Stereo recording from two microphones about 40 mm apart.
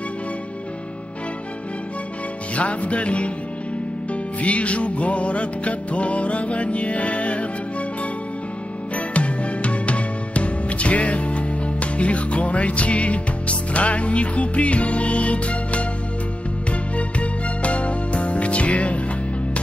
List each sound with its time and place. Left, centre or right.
2.5 s music: left
8.9 s music: left
16.9 s music: left